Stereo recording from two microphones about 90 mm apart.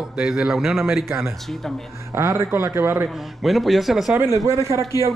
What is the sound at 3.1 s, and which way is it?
A man's voice, centre (ahead or behind).